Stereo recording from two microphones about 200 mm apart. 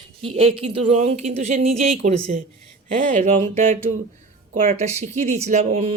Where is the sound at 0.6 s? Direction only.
25° right (ahead or behind).